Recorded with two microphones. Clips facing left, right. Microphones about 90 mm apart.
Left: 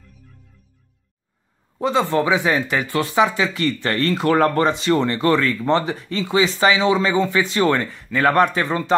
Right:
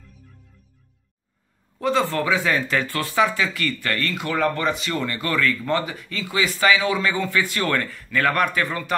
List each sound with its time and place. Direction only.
1.8 s speech: 20° left (ahead or behind)
4.3 s speech: 40° left (ahead or behind); by 8.9 s 25° left (ahead or behind)